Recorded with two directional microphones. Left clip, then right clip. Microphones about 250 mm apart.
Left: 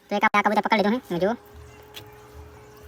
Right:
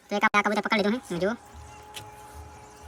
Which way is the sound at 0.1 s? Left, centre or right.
Centre.